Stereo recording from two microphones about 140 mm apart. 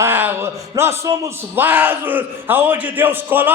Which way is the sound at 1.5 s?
15° right (ahead or behind).